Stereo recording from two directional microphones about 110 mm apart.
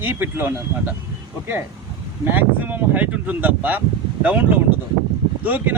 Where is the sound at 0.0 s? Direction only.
15° right (ahead or behind).